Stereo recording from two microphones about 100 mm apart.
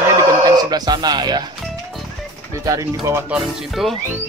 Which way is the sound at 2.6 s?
35° right (ahead or behind).